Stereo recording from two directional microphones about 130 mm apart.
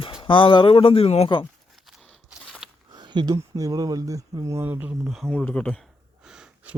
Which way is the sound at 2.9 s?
35° right (ahead or behind).